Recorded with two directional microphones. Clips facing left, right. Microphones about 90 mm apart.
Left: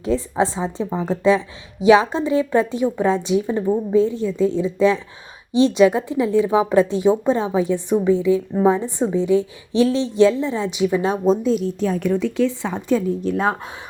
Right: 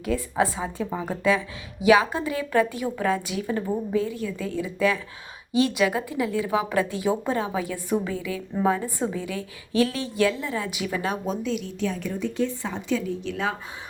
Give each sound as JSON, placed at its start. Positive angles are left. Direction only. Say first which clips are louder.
{"t": 0.0, "sound": "speech", "louder": "left 4 dB", "side_deg": 25}
{"t": 11.9, "sound": "speech", "louder": "left 8 dB", "side_deg": 65}
{"t": 12.7, "sound": "speech", "louder": "left 7 dB", "side_deg": 45}